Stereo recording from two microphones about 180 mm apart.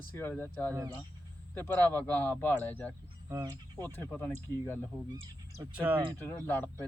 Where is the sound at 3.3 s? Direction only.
20° right (ahead or behind).